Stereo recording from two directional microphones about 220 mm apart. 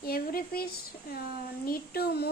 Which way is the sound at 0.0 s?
40° left (ahead or behind).